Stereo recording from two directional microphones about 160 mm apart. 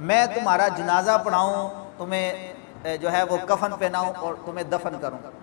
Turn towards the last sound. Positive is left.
turn(degrees=25)  # may be behind; listen again after turning